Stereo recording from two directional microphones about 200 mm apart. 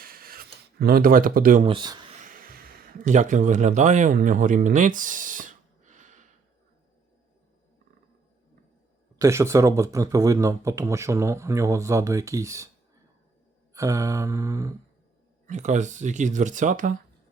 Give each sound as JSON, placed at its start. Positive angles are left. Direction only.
{"t": 0.0, "sound": "a sound", "side_deg": -45}
{"t": 1.6, "sound": "speech", "side_deg": -25}
{"t": 2.2, "sound": "a sound", "side_deg": -45}
{"t": 9.1, "sound": "speech", "side_deg": -15}
{"t": 13.7, "sound": "speech", "side_deg": -15}
{"t": 15.4, "sound": "speech", "side_deg": -35}